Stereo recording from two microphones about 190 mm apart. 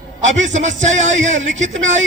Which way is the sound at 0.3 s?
40° right (ahead or behind).